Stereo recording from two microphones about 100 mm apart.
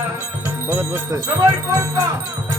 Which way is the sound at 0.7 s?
25° right (ahead or behind).